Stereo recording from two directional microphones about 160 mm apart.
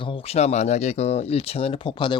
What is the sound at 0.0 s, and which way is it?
Speech, 35° left (ahead or behind).